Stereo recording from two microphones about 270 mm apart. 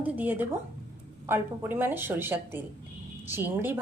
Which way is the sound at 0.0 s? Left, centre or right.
Centre.